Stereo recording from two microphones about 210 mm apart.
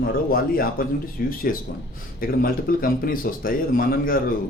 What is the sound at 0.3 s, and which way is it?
Speech, 45° left (ahead or behind).